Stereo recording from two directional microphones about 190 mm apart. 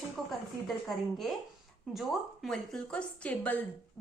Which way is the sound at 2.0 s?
Centre (ahead or behind).